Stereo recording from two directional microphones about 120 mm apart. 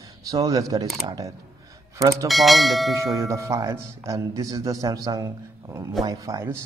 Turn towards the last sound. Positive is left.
turn(degrees=-30)  # may be behind; listen again after turning